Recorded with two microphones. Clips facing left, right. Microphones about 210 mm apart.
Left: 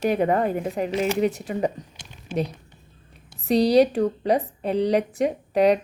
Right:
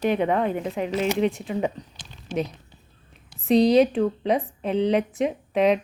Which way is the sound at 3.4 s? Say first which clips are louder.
Even; 35° left (ahead or behind).